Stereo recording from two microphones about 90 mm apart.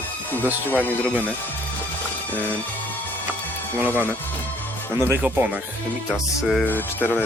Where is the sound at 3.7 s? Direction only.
20° right (ahead or behind).